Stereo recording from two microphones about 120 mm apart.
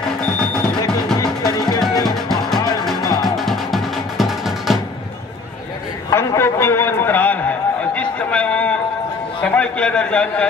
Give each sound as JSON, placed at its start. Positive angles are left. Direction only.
{"t": 1.2, "sound": "music", "side_deg": 30}
{"t": 2.0, "sound": "music", "side_deg": 0}
{"t": 3.1, "sound": "music", "side_deg": 35}
{"t": 3.3, "sound": "music", "side_deg": 0}
{"t": 6.0, "sound": "a sound", "side_deg": 20}
{"t": 9.4, "sound": "a man's voice", "side_deg": 10}